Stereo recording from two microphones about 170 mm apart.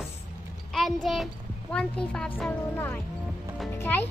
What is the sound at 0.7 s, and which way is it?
A child's voice, centre (ahead or behind).